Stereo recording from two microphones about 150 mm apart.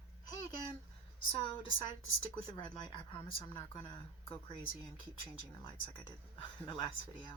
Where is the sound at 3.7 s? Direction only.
35° left (ahead or behind).